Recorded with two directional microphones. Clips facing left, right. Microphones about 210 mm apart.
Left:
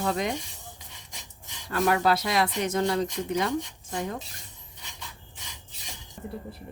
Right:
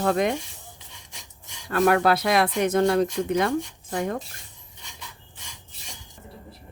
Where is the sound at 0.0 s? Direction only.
55° right (ahead or behind).